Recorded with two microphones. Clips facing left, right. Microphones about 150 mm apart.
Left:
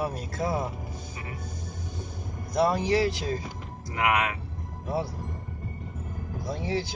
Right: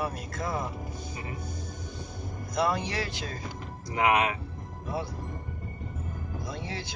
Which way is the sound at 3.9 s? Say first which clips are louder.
Right 1 dB; 20° right (ahead or behind).